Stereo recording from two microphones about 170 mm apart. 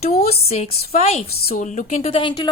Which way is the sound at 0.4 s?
40° left (ahead or behind).